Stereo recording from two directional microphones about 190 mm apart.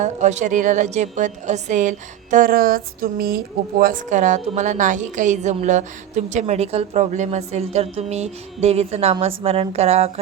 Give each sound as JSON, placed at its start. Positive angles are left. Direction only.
{"t": 0.0, "sound": "a woman's voice", "side_deg": -40}